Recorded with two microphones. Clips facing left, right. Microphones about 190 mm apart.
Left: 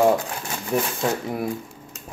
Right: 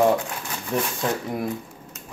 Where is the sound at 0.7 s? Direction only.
10° left (ahead or behind).